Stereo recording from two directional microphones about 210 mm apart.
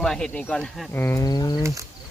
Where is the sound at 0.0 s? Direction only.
5° left (ahead or behind); by 1.6 s 20° left (ahead or behind).